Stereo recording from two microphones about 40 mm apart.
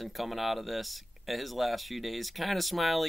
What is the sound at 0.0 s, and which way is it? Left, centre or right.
Speech, centre.